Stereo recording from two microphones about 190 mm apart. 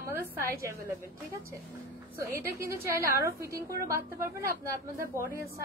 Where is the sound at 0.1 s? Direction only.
15° right (ahead or behind).